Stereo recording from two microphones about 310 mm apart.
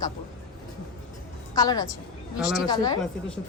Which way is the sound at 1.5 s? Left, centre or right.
Centre.